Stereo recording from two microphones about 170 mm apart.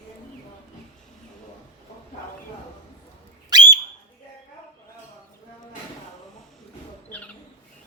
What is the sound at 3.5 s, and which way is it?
Whistle, 25° right (ahead or behind).